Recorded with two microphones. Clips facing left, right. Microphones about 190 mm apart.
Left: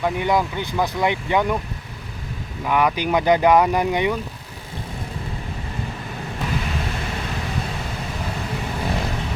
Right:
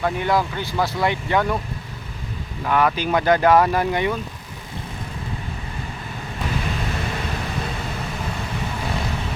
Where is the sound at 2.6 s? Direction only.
10° left (ahead or behind).